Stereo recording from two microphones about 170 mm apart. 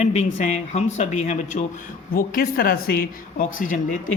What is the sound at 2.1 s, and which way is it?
Speech, 60° left (ahead or behind).